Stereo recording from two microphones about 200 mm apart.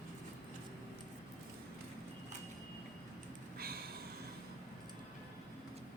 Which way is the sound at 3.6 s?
50° right (ahead or behind).